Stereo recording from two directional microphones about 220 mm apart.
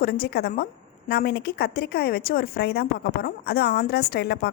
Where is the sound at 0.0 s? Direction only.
45° left (ahead or behind).